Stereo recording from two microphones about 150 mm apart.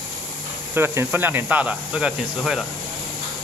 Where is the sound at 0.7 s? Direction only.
15° right (ahead or behind).